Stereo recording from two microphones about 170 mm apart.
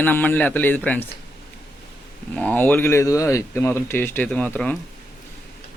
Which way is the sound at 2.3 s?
10° left (ahead or behind).